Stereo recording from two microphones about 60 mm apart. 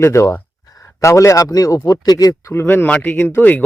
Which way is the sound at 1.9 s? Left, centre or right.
Left.